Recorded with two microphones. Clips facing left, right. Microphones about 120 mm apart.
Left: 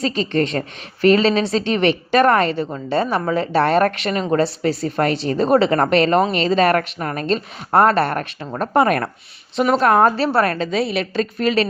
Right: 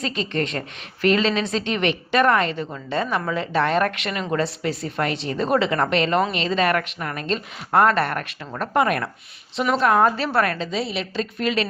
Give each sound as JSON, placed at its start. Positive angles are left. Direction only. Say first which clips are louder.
{"t": 0.0, "sound": "a woman's voice", "louder": "left 6 dB", "side_deg": 35}
{"t": 9.6, "sound": "a woman's voice", "louder": "left 4 dB", "side_deg": 45}
{"t": 10.6, "sound": "a woman's voice", "louder": "left 6 dB", "side_deg": 60}